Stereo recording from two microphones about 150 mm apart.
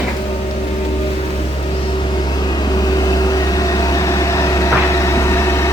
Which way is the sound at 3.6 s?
25° left (ahead or behind).